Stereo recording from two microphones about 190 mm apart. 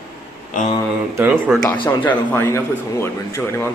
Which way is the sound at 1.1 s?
10° right (ahead or behind).